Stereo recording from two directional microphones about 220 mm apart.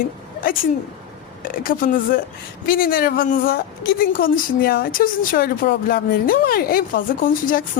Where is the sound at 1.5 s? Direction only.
40° left (ahead or behind).